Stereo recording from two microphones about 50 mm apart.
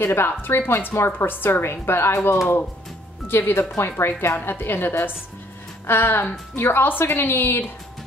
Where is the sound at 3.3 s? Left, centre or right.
Left.